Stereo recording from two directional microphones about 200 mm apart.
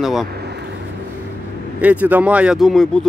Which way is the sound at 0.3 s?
55° right (ahead or behind).